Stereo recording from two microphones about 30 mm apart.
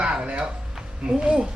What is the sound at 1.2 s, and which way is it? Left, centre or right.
Speech, right.